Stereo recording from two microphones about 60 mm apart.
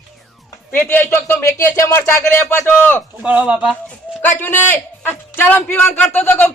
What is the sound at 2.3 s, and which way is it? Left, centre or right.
Speech, left.